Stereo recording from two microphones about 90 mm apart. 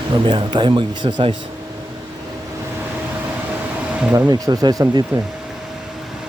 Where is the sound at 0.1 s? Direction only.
65° right (ahead or behind).